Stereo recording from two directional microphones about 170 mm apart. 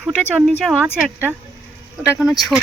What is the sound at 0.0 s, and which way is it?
Speech, 5° right (ahead or behind).